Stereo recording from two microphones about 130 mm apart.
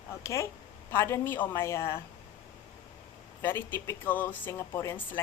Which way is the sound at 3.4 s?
15° left (ahead or behind).